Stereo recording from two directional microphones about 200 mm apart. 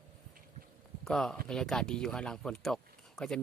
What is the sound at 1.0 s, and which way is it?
Speech, centre (ahead or behind).